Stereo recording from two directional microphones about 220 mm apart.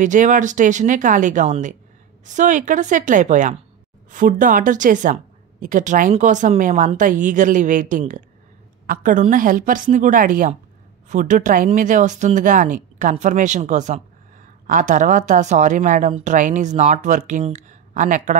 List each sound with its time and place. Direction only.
0.0 s a woman's voice: 35° right (ahead or behind)